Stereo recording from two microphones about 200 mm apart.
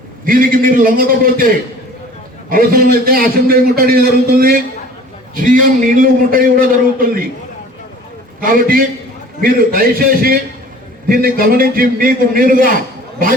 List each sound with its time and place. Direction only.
0.3 s a man's voice: 45° right (ahead or behind)
8.4 s a man's voice: 45° right (ahead or behind)